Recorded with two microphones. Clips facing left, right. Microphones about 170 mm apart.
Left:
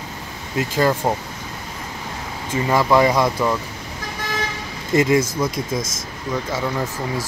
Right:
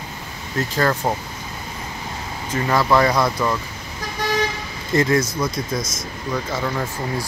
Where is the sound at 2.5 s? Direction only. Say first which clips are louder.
Left 1 dB; 10° left (ahead or behind).